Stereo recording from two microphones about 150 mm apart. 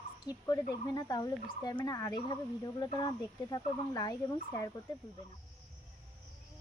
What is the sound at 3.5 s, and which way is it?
Speech, 25° left (ahead or behind).